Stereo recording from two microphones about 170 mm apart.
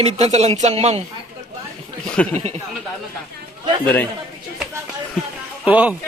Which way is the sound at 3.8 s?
10° left (ahead or behind).